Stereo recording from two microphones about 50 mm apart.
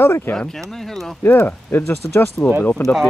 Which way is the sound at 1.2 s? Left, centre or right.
Left.